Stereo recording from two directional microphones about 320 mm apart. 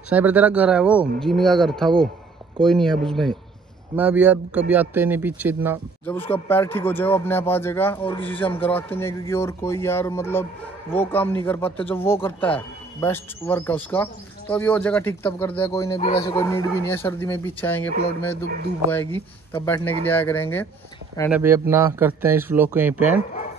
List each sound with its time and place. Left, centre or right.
0.1 s speech: centre
6.0 s a man's voice: centre
8.3 s a man's voice: centre
16.0 s a man's voice: centre
16.3 s a man's voice: centre
18.9 s a man's voice: centre
21.3 s speech: centre